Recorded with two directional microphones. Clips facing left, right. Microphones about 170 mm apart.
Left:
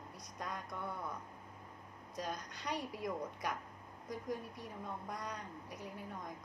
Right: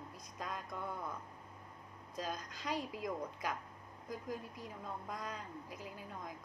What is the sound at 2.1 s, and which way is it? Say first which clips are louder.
A woman's voice: even; centre (ahead or behind).